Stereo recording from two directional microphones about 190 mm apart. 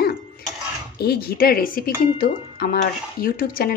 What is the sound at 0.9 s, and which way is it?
A woman's voice, 55° left (ahead or behind).